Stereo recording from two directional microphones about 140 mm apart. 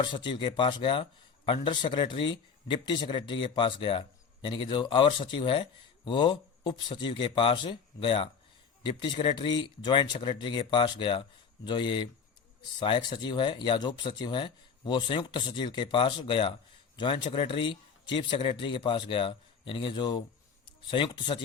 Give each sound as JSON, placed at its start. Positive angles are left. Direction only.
{"t": 0.0, "sound": "speech", "side_deg": 35}